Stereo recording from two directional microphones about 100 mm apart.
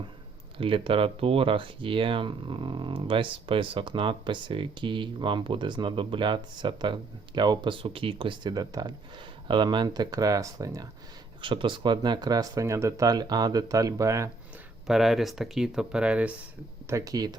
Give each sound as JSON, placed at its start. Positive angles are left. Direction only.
{"t": 0.6, "sound": "speech", "side_deg": -60}
{"t": 8.4, "sound": "speech", "side_deg": -40}
{"t": 11.4, "sound": "speech", "side_deg": -55}
{"t": 14.8, "sound": "speech", "side_deg": -5}
{"t": 16.8, "sound": "speech", "side_deg": -35}